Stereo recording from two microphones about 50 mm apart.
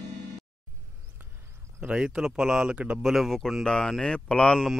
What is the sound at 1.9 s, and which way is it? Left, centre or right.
Speech, centre.